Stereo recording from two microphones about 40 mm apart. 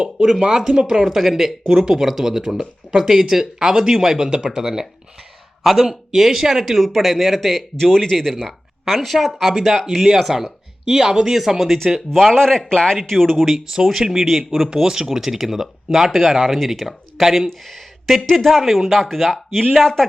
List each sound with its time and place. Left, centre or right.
0.3 s speech: centre
1.0 s speech: centre
12.1 s speech: centre
14.5 s speech: centre
16.8 s speech: centre
17.7 s a sound: centre
18.3 s speech: centre